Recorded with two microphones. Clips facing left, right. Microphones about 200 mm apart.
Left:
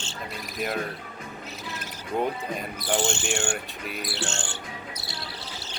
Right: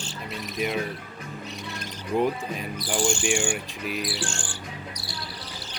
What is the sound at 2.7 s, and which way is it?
Speech, 25° left (ahead or behind).